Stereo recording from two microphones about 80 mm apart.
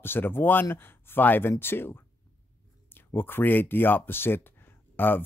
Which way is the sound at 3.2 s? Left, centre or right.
Left.